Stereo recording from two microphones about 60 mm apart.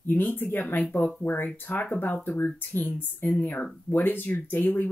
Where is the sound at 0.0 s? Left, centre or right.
Left.